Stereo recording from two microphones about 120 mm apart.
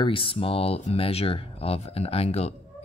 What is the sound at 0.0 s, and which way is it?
Speech, 50° left (ahead or behind).